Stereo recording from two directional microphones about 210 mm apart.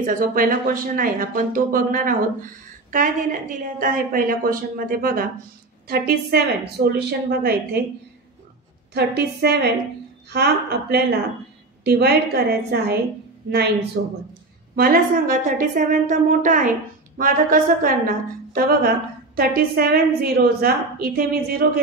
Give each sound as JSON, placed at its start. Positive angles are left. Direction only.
{"t": 0.0, "sound": "a woman's voice", "side_deg": -40}
{"t": 8.9, "sound": "a woman's voice", "side_deg": -50}